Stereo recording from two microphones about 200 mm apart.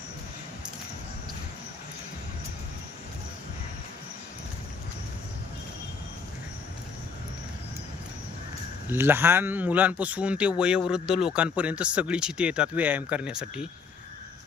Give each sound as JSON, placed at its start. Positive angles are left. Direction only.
{"t": 8.9, "sound": "speech", "side_deg": -10}